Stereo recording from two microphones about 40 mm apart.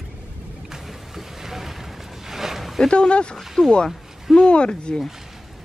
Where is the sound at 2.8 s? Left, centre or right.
Left.